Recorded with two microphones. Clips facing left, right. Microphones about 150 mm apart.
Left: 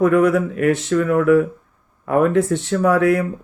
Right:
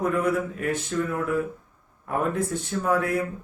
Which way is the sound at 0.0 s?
90° left.